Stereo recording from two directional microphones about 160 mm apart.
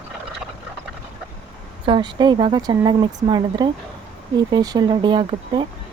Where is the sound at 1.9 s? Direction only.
30° right (ahead or behind).